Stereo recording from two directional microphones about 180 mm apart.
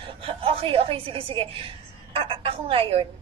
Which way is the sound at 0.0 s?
30° right (ahead or behind).